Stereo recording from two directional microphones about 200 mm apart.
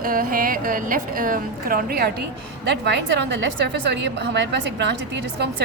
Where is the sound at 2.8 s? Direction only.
60° right (ahead or behind).